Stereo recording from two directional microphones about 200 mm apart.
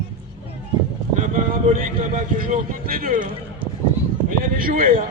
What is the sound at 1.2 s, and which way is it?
A man's voice, 40° right (ahead or behind).